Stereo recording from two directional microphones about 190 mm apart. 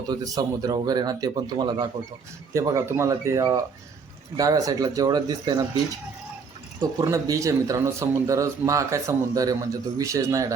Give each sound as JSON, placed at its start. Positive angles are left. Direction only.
{"t": 0.1, "sound": "speech", "side_deg": -20}
{"t": 6.7, "sound": "speech", "side_deg": -15}